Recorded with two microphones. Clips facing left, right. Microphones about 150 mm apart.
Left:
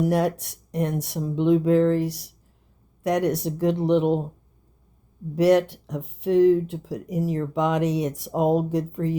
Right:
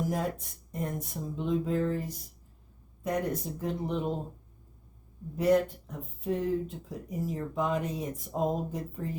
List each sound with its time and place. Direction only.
0.0 s speech: 80° left
5.3 s speech: 80° left